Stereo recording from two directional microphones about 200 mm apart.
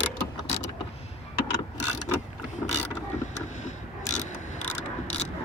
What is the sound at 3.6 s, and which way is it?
Mechanisms, 35° left (ahead or behind).